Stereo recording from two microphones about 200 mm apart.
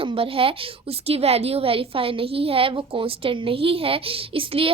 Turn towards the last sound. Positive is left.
turn(degrees=-25)  # may be behind; listen again after turning